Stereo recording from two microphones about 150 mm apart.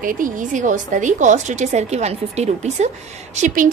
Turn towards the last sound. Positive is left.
turn(degrees=-50)  # may be behind; listen again after turning